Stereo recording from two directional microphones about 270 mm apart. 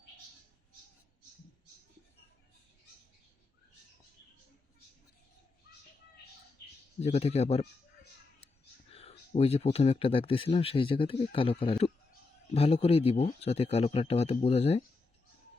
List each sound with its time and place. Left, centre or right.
7.0 s speech: left
8.9 s speech: left